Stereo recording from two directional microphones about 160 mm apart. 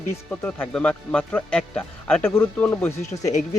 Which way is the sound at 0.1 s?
10° left (ahead or behind).